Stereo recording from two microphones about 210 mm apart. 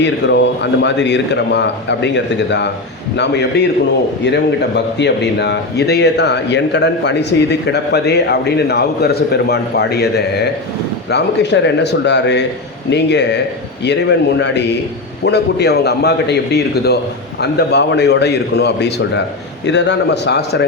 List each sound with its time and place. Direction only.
0.0 s a man's voice: 55° left (ahead or behind)